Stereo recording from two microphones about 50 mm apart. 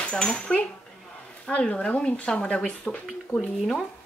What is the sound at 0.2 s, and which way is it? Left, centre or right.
Speech, centre.